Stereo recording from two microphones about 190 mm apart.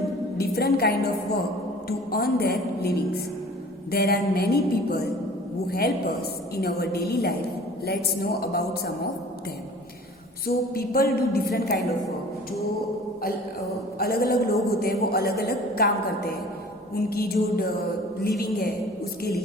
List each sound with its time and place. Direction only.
0.3 s a woman's voice: 55° left (ahead or behind)
10.4 s a woman's voice: 50° left (ahead or behind)
14.0 s a woman's voice: 55° left (ahead or behind)